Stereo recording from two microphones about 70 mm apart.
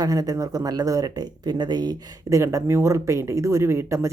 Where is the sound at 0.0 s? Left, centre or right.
Right.